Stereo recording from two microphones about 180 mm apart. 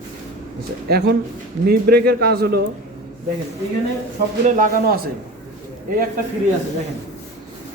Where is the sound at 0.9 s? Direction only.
60° right (ahead or behind).